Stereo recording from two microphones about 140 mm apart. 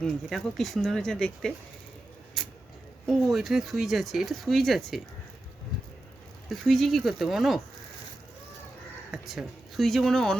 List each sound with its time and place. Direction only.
0.0 s speech: 5° left (ahead or behind)
2.4 s a sound: centre (ahead or behind)
3.1 s speech: centre (ahead or behind)
6.5 s speech: centre (ahead or behind)
9.1 s speech: centre (ahead or behind)